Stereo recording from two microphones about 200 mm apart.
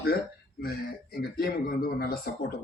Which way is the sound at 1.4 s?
50° left (ahead or behind).